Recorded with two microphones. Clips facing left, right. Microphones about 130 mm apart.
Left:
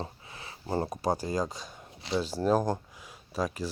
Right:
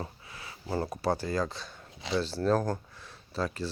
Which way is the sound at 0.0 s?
25° left (ahead or behind).